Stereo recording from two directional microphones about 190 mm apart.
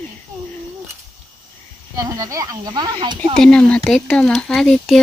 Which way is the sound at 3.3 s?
5° left (ahead or behind).